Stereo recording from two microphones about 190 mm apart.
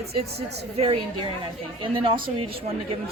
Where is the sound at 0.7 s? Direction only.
30° right (ahead or behind).